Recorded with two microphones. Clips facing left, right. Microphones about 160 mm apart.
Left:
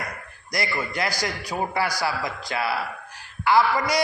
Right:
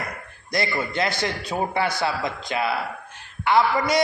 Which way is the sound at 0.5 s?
25° right (ahead or behind).